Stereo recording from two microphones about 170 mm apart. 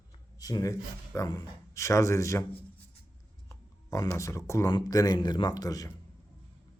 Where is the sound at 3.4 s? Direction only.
20° left (ahead or behind).